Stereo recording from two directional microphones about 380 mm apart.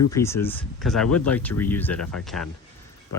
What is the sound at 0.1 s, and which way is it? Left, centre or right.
Speech, centre.